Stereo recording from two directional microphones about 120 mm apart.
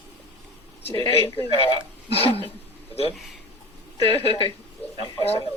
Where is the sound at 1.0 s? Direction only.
50° left (ahead or behind).